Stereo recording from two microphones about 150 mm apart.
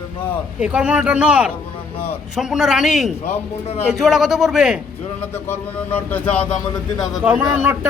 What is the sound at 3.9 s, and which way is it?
Speech, 5° right (ahead or behind).